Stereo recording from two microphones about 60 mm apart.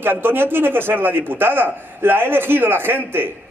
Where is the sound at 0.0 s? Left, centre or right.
Right.